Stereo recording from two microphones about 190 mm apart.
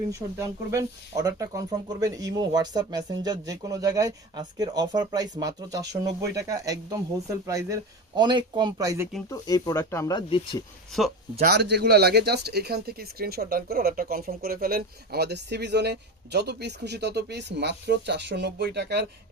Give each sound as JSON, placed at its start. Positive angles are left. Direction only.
{"t": 0.1, "sound": "speech", "side_deg": -15}
{"t": 9.3, "sound": "speech", "side_deg": 20}
{"t": 11.3, "sound": "speech", "side_deg": -60}